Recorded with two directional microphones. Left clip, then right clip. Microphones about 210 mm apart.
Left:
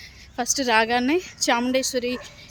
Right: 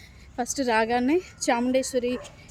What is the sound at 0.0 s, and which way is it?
A woman's voice, centre (ahead or behind).